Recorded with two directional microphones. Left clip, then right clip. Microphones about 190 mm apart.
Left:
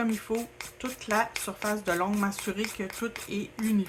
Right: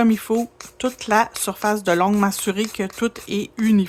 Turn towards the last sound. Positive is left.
turn(degrees=-60)  # may be behind; listen again after turning